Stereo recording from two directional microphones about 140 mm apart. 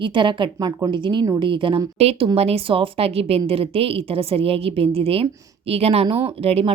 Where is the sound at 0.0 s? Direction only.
35° right (ahead or behind).